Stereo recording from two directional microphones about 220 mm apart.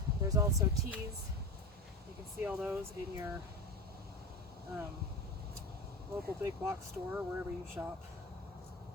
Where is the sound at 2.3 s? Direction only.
5° right (ahead or behind).